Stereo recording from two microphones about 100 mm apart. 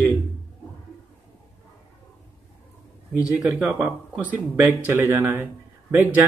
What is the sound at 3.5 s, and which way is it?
Speech, 15° right (ahead or behind).